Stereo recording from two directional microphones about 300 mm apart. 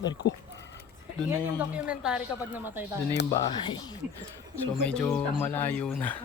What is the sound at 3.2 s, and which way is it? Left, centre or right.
Speech, centre.